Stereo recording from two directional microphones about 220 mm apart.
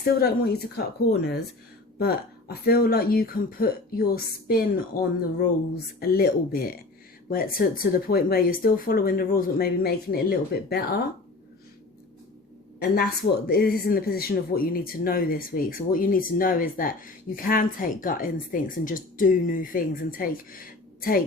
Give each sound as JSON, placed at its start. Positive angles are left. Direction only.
{"t": 0.0, "sound": "speech", "side_deg": 45}
{"t": 2.0, "sound": "speech", "side_deg": 45}
{"t": 13.5, "sound": "speech", "side_deg": 45}